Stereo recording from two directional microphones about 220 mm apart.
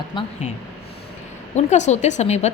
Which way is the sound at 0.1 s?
20° left (ahead or behind).